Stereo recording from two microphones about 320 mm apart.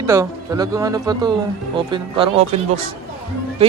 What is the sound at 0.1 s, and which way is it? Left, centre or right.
Speech, centre.